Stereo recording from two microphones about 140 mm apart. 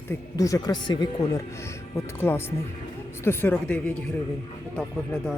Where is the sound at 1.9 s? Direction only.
15° left (ahead or behind).